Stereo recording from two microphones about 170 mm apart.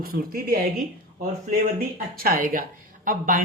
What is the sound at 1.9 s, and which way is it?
Speech, 60° right (ahead or behind).